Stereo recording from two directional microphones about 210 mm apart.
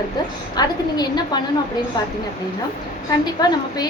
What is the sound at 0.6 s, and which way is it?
Speech, 20° left (ahead or behind).